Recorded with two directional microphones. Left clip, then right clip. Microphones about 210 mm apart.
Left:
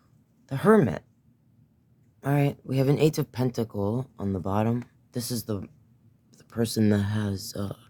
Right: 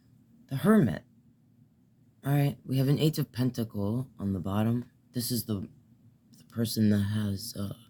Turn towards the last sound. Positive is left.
turn(degrees=45)  # may be behind; listen again after turning